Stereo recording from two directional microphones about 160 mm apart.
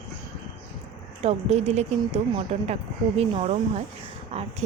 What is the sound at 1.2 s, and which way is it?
Speech, 40° right (ahead or behind).